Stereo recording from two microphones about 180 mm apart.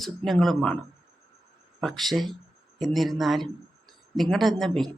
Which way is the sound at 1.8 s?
Centre (ahead or behind).